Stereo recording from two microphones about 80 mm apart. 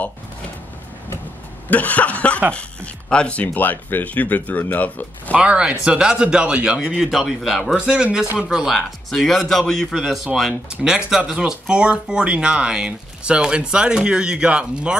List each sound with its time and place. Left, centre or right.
1.7 s speech: centre
5.3 s a man's voice: centre